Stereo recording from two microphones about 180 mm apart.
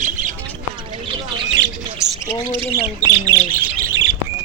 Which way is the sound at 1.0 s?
30° right (ahead or behind).